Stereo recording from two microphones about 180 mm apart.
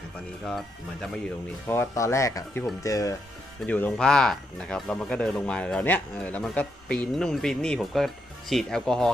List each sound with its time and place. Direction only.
1.6 s speech: 15° left (ahead or behind)